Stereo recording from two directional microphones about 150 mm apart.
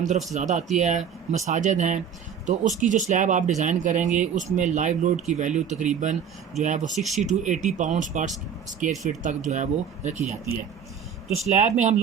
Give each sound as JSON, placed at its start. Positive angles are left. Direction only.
{"t": 0.3, "sound": "a man's voice", "side_deg": -55}
{"t": 6.9, "sound": "speech", "side_deg": 0}
{"t": 7.3, "sound": "a man's voice", "side_deg": -55}
{"t": 11.4, "sound": "speech", "side_deg": -50}